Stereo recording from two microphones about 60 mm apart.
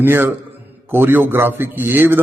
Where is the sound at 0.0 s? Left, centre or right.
Right.